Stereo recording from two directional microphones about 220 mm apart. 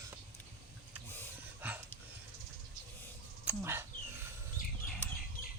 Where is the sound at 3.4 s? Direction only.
10° right (ahead or behind).